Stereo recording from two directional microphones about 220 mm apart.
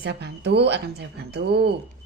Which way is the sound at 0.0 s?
50° right (ahead or behind).